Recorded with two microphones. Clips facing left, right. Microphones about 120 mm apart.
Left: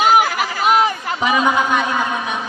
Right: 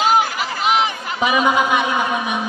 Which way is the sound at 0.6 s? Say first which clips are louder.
Left 3 dB; 45° left (ahead or behind).